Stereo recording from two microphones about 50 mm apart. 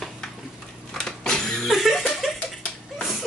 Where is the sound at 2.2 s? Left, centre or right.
Centre.